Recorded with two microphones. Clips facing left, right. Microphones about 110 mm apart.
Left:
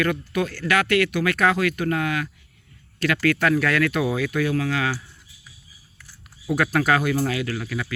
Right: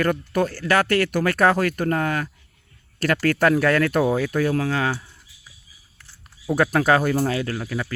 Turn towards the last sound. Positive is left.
turn(degrees=-30)  # may be behind; listen again after turning